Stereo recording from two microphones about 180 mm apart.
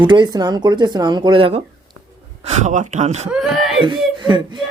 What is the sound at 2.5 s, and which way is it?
Speech, 40° right (ahead or behind).